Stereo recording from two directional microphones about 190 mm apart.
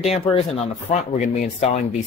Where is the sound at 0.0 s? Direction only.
35° left (ahead or behind).